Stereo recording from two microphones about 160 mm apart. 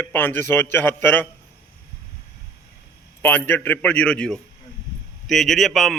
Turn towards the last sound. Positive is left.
turn(degrees=0)  # may be behind; listen again after turning